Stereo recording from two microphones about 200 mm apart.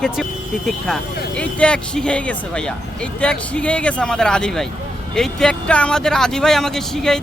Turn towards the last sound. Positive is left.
turn(degrees=0)  # may be behind; listen again after turning